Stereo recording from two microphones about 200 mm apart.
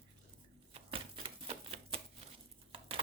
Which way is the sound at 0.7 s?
25° right (ahead or behind).